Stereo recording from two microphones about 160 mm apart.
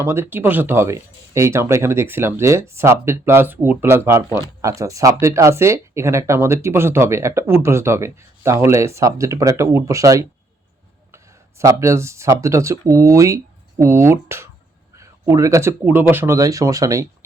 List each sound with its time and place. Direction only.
0.0 s speech: 15° right (ahead or behind)